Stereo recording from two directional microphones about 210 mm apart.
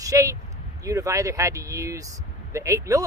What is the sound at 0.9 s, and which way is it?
Speech, 15° right (ahead or behind).